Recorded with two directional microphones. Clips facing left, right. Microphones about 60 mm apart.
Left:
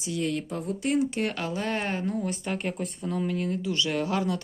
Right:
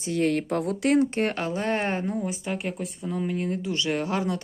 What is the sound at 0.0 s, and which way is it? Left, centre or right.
Speech, right.